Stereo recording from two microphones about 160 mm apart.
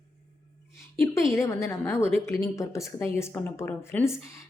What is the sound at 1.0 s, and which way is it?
A woman's voice, 15° left (ahead or behind).